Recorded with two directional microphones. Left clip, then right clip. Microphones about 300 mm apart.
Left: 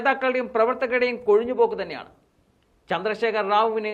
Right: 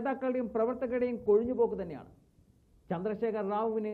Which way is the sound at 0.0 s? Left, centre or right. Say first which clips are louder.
Left 11 dB; centre.